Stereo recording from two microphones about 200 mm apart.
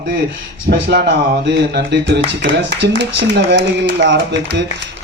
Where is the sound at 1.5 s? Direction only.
60° right (ahead or behind).